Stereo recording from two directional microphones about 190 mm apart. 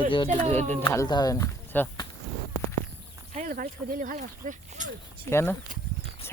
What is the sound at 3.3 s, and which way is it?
Speech, 45° right (ahead or behind).